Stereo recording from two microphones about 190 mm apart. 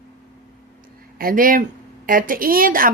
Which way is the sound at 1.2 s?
50° right (ahead or behind).